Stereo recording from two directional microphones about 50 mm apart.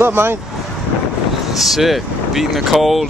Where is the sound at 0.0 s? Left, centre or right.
Right.